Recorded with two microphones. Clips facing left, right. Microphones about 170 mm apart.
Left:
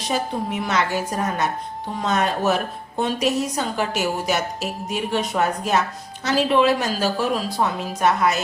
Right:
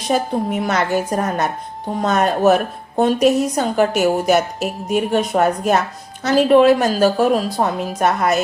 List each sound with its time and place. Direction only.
0.1 s a woman's voice: 50° right (ahead or behind)